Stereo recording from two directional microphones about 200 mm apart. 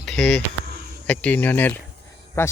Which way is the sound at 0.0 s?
Centre (ahead or behind).